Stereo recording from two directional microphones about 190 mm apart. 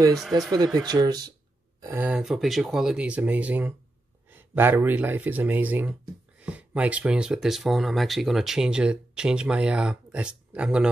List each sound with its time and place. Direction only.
0.7 s speech: 20° right (ahead or behind)
1.8 s speech: 10° right (ahead or behind)